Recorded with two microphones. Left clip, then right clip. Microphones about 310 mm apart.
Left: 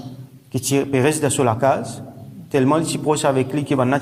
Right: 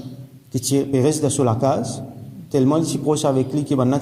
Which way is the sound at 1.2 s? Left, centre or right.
Left.